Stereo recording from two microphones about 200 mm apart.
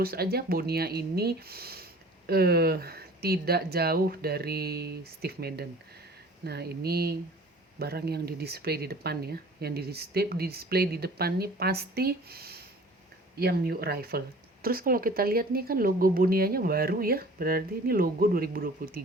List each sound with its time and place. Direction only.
0.0 s speech: 50° right (ahead or behind)